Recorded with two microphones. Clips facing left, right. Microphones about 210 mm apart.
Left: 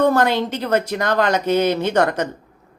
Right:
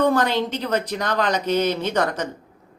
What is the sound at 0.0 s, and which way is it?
A woman's voice, 50° left (ahead or behind).